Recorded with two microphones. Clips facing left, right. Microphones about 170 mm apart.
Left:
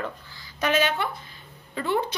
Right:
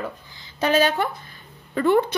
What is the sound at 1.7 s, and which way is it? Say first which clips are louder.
Speech: right 8 dB; 55° right (ahead or behind).